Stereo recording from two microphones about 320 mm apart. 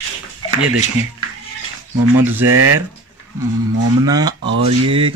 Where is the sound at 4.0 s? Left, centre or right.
Centre.